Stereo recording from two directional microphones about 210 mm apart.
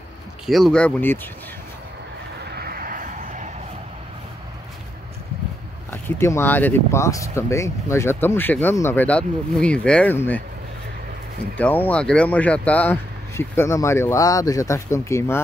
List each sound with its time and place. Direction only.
0.5 s speech: centre (ahead or behind)
2.5 s a sound: 45° right (ahead or behind)
5.9 s speech: 10° left (ahead or behind)
11.5 s speech: 10° left (ahead or behind)